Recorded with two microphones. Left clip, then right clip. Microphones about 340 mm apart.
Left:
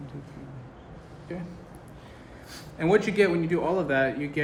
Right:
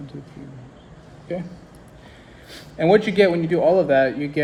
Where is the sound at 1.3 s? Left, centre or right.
Right.